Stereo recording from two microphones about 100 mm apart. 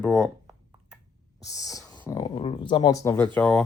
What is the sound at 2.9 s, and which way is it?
Speech, 30° left (ahead or behind).